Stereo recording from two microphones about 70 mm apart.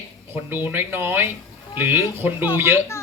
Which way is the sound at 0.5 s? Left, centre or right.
Right.